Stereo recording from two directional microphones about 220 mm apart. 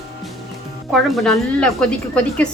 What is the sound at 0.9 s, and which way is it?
A woman's voice, centre (ahead or behind).